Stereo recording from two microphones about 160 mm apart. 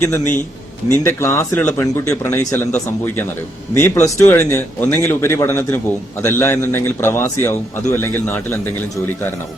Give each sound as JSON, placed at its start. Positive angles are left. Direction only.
{"t": 0.0, "sound": "a man's voice", "side_deg": 15}